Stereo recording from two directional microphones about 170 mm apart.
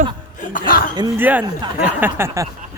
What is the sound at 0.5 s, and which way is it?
Speech, 60° left (ahead or behind).